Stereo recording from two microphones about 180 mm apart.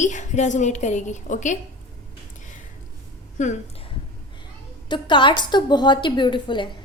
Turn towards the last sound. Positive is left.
turn(degrees=25)  # may be behind; listen again after turning